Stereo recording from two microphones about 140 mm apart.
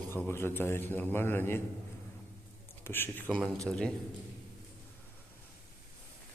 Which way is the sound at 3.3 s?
Centre (ahead or behind).